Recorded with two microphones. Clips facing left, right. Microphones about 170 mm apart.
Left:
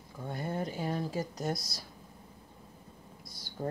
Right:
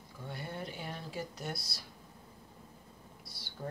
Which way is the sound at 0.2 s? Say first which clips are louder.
Left 7 dB; 45° left (ahead or behind).